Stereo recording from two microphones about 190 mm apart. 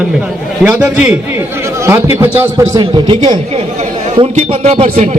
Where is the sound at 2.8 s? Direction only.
25° right (ahead or behind).